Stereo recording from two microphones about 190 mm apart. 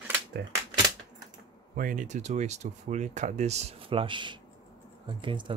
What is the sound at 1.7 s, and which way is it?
Speech, 45° right (ahead or behind).